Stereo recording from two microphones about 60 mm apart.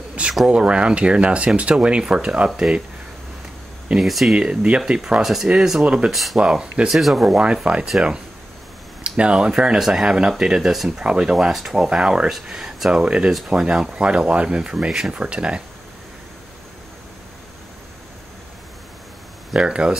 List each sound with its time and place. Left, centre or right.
0.5 s speech: centre
3.9 s speech: centre
4.4 s speech: centre
5.2 s speech: centre
6.1 s speech: centre
6.4 s speech: centre
6.9 s speech: centre
7.7 s speech: centre
9.0 s speech: centre
9.8 s speech: centre
11.3 s speech: centre
13.0 s speech: centre
19.5 s speech: centre